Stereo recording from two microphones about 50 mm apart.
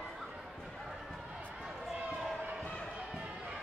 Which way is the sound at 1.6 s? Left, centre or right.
Centre.